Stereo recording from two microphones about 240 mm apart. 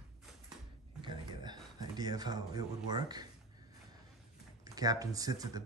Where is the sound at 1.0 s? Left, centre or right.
Centre.